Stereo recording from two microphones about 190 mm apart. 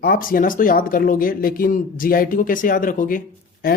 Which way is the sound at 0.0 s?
50° left (ahead or behind).